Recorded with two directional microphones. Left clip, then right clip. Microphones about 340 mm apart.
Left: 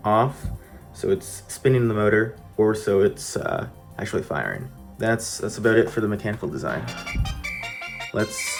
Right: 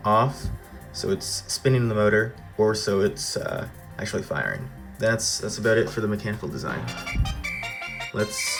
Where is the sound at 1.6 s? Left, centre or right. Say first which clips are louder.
Left 2 dB; centre.